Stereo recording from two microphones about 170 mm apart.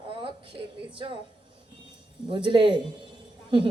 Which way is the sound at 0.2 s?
30° right (ahead or behind).